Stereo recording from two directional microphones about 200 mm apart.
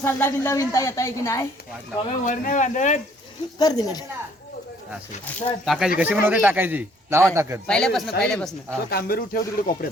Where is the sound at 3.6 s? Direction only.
20° left (ahead or behind).